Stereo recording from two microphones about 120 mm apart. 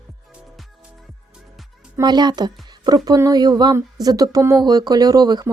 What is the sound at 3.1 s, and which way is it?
Speech, 30° right (ahead or behind).